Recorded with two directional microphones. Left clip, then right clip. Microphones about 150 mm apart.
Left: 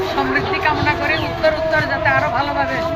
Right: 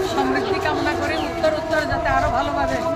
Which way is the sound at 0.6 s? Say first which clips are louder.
Left 4 dB; 25° right (ahead or behind).